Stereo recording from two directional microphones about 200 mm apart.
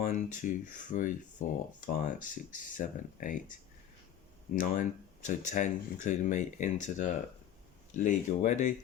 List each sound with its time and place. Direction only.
0.0 s speech: 40° left (ahead or behind)
4.5 s speech: 40° left (ahead or behind)